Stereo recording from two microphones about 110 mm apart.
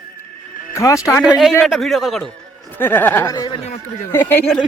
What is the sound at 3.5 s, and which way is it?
Speech, 90° left.